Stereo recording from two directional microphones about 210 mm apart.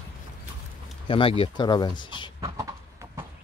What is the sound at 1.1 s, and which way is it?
Speech, 25° left (ahead or behind).